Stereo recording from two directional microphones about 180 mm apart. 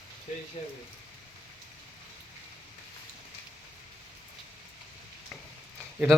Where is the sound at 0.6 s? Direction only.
35° left (ahead or behind).